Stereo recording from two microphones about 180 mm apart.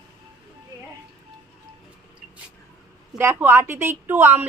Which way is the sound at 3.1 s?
10° right (ahead or behind).